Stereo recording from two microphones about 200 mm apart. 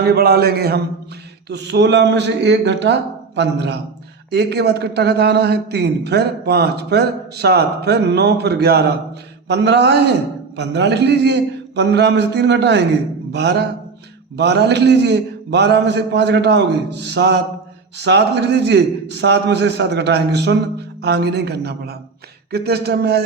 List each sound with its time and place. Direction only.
0.0 s a man's voice: 55° right (ahead or behind)